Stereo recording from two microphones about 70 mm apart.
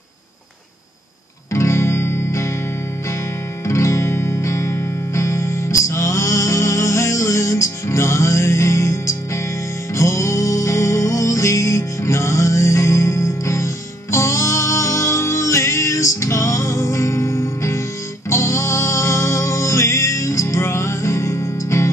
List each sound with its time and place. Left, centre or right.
1.5 s music: left
3.6 s music: left